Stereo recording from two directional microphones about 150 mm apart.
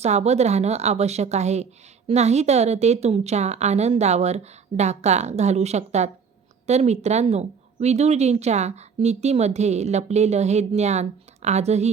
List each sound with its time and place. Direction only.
0.0 s speech: 45° right (ahead or behind)